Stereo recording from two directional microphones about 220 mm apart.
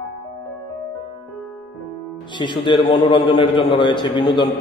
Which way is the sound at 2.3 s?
20° left (ahead or behind).